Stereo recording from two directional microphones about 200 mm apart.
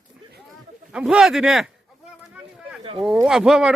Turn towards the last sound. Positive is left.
turn(degrees=-5)  # may be behind; listen again after turning